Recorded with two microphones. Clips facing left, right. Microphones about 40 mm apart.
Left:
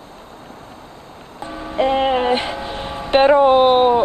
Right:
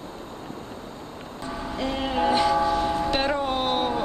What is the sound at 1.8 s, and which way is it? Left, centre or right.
Train, left.